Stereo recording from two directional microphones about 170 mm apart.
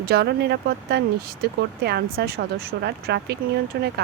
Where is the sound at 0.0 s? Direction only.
70° right (ahead or behind).